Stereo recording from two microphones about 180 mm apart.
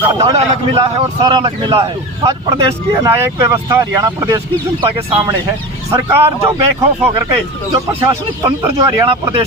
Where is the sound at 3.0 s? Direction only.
15° right (ahead or behind).